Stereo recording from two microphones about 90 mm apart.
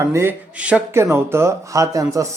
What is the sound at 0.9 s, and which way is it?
Speech, 30° right (ahead or behind).